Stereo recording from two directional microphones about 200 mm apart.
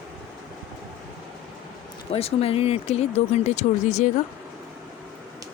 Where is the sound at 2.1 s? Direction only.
30° left (ahead or behind).